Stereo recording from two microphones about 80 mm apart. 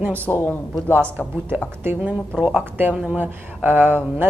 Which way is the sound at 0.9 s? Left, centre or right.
Right.